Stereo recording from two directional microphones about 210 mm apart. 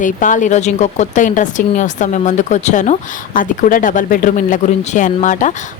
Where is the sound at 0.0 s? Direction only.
40° left (ahead or behind).